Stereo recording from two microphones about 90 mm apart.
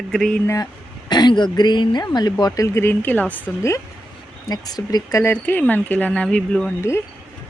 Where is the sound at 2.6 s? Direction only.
35° left (ahead or behind).